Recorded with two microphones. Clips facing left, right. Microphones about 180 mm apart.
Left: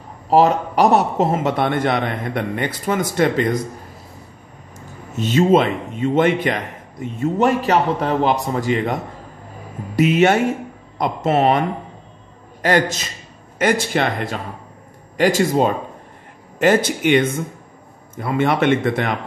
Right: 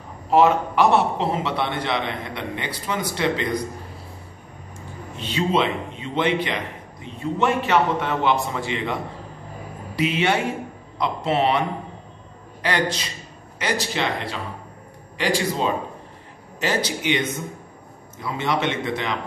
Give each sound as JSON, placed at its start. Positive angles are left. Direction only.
{"t": 0.3, "sound": "a man's voice", "side_deg": 35}
{"t": 5.1, "sound": "a man's voice", "side_deg": 45}
{"t": 12.6, "sound": "a man's voice", "side_deg": 45}